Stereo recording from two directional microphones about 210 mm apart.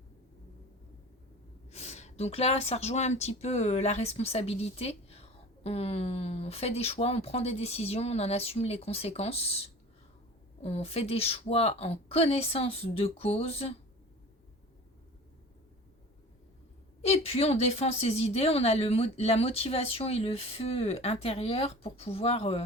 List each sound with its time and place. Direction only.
1.7 s a woman's voice: 30° left (ahead or behind)
17.0 s a woman's voice: 30° left (ahead or behind)